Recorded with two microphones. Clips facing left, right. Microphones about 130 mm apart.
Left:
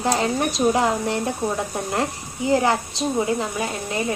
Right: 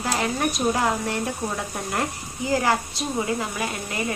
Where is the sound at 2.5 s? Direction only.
25° left (ahead or behind).